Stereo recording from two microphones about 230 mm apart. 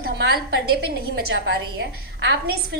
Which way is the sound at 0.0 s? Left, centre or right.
Right.